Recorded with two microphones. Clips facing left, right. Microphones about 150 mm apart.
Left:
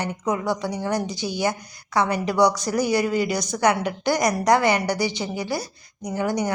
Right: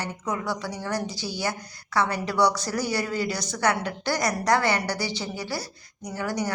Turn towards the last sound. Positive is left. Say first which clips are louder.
# left 5 dB
turn(degrees=20)  # may be behind; listen again after turning